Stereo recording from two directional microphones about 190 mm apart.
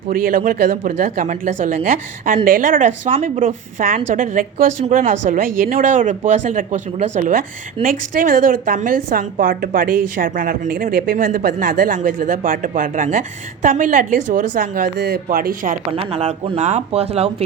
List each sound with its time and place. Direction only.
0.1 s a woman's voice: 50° right (ahead or behind)
14.9 s a woman's voice: 60° right (ahead or behind)
16.0 s speech: 30° right (ahead or behind)